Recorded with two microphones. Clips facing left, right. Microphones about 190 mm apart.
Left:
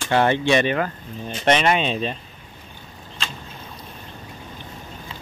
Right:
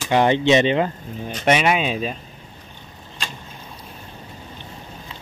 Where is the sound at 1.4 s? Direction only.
10° right (ahead or behind).